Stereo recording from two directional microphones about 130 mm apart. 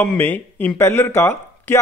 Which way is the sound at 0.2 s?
15° left (ahead or behind).